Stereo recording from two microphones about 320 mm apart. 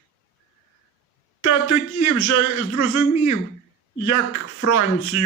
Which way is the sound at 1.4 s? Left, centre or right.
Left.